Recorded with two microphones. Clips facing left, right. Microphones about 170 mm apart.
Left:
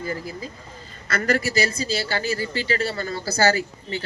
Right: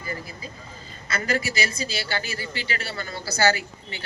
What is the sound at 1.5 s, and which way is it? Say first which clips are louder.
A woman's voice: left 5 dB; 35° left (ahead or behind).